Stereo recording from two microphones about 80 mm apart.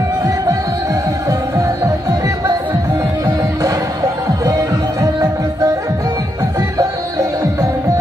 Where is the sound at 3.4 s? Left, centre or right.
Right.